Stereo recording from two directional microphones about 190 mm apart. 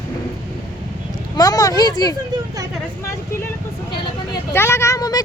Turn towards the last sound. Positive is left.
turn(degrees=20)  # may be behind; listen again after turning